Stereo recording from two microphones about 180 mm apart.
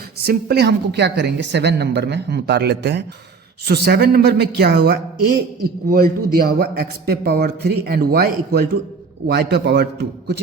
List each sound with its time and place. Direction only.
0.3 s a woman's voice: 65° right (ahead or behind)
5.6 s a man's voice: 55° right (ahead or behind); by 10.4 s 70° right (ahead or behind)